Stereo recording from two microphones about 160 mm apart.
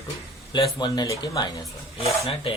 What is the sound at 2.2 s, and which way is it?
Speech, 35° left (ahead or behind).